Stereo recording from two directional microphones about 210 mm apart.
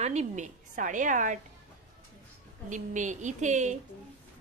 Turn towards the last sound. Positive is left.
turn(degrees=-35)  # may be behind; listen again after turning